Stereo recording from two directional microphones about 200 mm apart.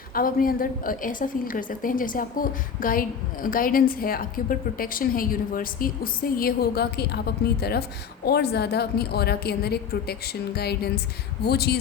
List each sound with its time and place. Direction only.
0.1 s a woman's voice: 45° left (ahead or behind)